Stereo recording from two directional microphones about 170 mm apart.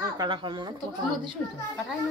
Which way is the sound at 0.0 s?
25° right (ahead or behind).